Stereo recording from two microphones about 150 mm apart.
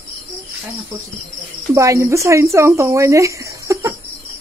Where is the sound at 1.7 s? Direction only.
20° right (ahead or behind).